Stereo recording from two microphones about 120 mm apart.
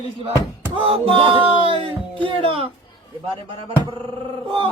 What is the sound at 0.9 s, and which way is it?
Music, 50° right (ahead or behind).